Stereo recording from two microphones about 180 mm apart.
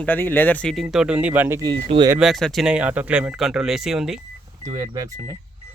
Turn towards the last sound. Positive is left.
turn(degrees=-20)  # may be behind; listen again after turning